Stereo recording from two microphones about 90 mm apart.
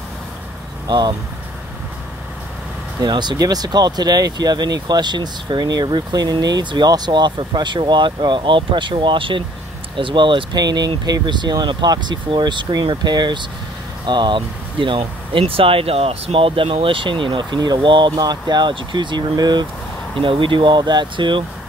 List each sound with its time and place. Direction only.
0.8 s speech: 50° right (ahead or behind)
3.0 s speech: 55° right (ahead or behind)
20.2 s speech: 70° right (ahead or behind)